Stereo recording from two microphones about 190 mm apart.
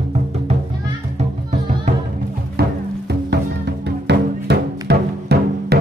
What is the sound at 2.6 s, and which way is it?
Music, 60° right (ahead or behind).